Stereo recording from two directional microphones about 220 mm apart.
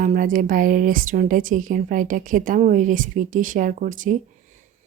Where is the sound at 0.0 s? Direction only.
35° right (ahead or behind).